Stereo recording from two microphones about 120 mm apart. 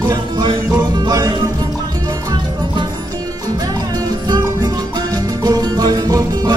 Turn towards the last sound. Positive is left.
turn(degrees=-30)  # may be behind; listen again after turning